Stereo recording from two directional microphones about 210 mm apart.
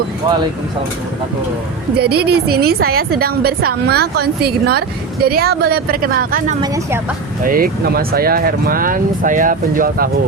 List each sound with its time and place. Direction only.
2.0 s a woman's voice: 50° right (ahead or behind)